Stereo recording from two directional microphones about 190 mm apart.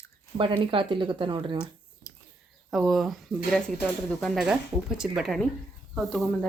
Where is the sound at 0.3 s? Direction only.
25° right (ahead or behind).